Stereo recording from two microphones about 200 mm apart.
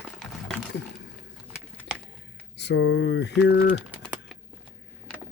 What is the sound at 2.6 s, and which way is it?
Speech, 55° left (ahead or behind).